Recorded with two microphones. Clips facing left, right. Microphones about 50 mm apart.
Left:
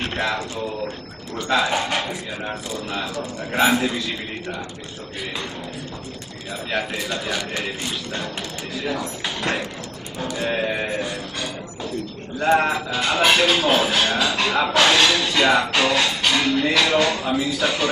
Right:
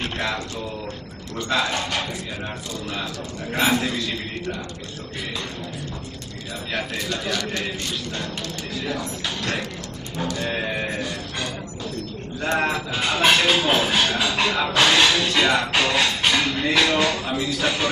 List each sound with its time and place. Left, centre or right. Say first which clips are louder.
0.0 s a sound: left 2 dB; centre
1.5 s a man's voice: left 3 dB; centre
6.7 s a man's voice: left 2 dB; centre
8.8 s speech: left 3 dB; centre
9.4 s a man's voice: left 5 dB; centre
12.4 s speech: left 4 dB; centre